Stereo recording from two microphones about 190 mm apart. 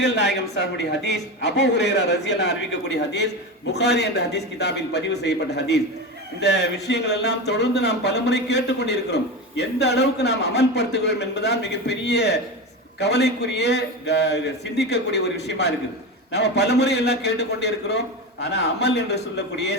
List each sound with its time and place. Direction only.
0.0 s speech: 65° left (ahead or behind)